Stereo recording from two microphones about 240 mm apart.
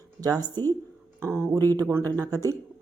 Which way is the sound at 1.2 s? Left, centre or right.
Centre.